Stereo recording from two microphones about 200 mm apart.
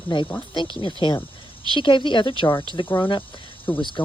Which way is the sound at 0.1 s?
25° left (ahead or behind).